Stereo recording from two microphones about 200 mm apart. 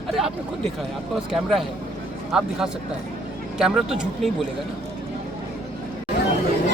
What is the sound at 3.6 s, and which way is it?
Speech, 5° right (ahead or behind).